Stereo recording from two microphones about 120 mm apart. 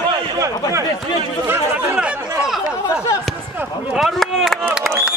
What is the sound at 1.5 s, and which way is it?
Speech, 15° right (ahead or behind).